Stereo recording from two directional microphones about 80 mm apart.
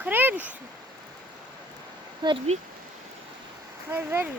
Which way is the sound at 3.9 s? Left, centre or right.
Right.